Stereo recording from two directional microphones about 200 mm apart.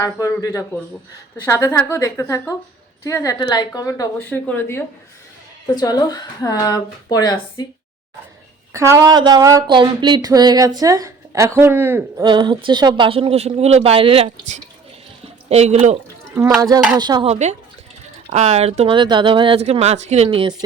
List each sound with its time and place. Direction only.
0.0 s a woman's voice: 15° left (ahead or behind)
8.7 s a woman's voice: 15° right (ahead or behind)
12.2 s speech: 25° right (ahead or behind)
15.2 s a sound: 30° right (ahead or behind)
16.6 s speech: 20° right (ahead or behind)
17.3 s speech: 35° right (ahead or behind)